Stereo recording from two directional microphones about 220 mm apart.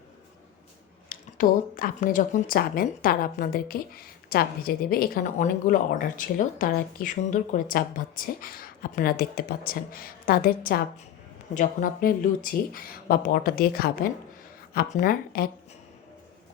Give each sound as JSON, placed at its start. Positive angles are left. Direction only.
{"t": 1.1, "sound": "a woman's voice", "side_deg": 40}